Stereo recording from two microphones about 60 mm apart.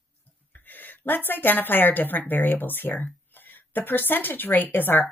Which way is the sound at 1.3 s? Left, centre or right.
Left.